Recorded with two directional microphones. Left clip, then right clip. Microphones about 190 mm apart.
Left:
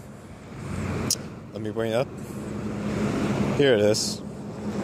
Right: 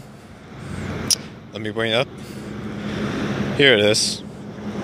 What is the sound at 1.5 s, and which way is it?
Speech, centre (ahead or behind).